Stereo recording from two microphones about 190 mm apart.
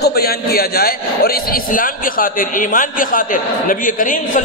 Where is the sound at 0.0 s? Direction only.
55° left (ahead or behind).